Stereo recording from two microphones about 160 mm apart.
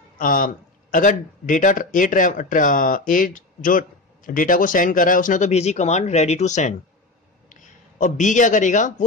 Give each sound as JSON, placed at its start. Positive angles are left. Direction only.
{"t": 0.2, "sound": "speech", "side_deg": 60}
{"t": 8.0, "sound": "a man's voice", "side_deg": 50}